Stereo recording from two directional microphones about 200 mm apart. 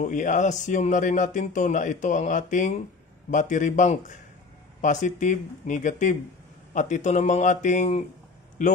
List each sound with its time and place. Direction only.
0.0 s speech: 40° left (ahead or behind)